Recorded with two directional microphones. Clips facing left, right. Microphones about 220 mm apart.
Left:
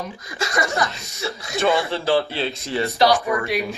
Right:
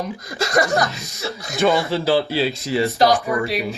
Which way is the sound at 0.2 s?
40° right (ahead or behind).